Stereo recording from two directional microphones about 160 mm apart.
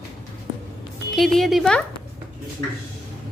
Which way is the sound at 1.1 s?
Centre (ahead or behind).